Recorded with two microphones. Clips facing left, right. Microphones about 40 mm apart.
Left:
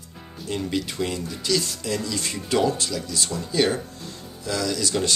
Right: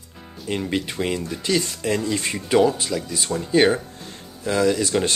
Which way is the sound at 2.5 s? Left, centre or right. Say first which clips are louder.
Right 4 dB; centre.